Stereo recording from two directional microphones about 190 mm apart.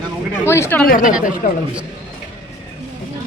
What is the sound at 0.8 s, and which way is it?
Speech, 45° left (ahead or behind).